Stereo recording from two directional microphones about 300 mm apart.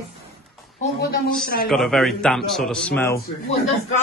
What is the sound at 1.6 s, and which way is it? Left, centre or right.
A man's voice, centre.